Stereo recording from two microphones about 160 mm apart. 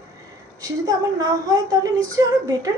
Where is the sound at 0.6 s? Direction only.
20° right (ahead or behind).